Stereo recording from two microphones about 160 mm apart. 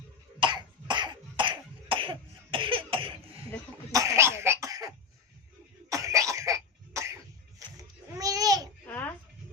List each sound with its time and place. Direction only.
0.3 s cough: 30° right (ahead or behind)
3.9 s cough: 20° right (ahead or behind)
5.9 s cough: 20° right (ahead or behind)
8.2 s babbling: 20° right (ahead or behind)
8.9 s a sound: 10° left (ahead or behind)